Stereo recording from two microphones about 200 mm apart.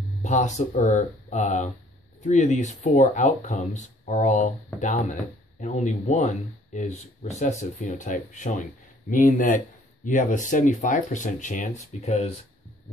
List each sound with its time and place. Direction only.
0.2 s speech: 35° left (ahead or behind)